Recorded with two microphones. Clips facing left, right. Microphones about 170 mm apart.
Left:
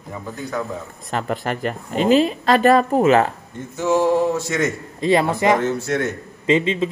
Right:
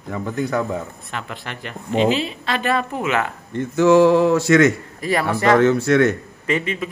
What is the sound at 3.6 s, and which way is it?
Speech, 85° right.